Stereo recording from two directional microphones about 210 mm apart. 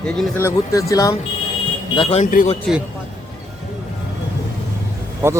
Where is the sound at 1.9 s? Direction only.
25° left (ahead or behind).